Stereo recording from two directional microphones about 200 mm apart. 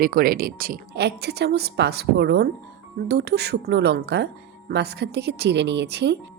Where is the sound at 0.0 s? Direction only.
45° right (ahead or behind).